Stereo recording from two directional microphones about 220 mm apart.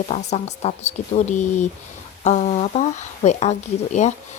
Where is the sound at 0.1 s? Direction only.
30° left (ahead or behind).